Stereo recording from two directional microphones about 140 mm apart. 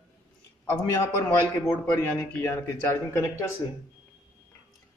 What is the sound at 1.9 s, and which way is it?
A man's voice, 15° left (ahead or behind).